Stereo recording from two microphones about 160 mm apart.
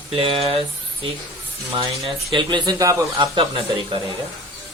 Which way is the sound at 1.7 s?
35° right (ahead or behind).